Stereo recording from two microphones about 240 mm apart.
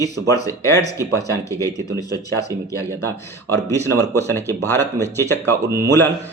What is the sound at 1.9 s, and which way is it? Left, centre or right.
Speech, right.